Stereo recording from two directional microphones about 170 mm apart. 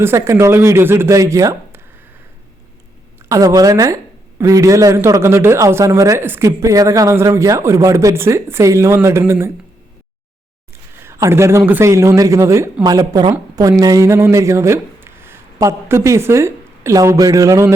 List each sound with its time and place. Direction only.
0.0 s speech: 15° right (ahead or behind)
3.2 s speech: 20° right (ahead or behind)
11.0 s speech: 15° right (ahead or behind)